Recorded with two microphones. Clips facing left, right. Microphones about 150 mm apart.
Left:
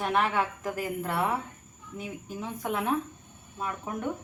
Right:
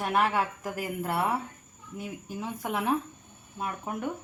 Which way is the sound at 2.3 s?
10° right (ahead or behind).